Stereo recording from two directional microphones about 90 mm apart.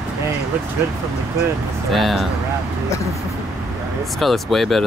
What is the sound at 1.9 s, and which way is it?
Speech, centre (ahead or behind).